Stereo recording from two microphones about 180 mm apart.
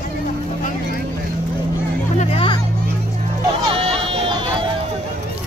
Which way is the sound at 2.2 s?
30° left (ahead or behind).